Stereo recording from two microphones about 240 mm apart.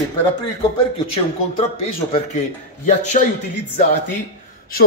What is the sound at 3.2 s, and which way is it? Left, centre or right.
Speech, left.